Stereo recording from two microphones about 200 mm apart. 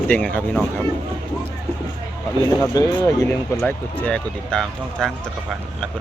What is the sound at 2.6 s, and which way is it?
Speech, 15° left (ahead or behind).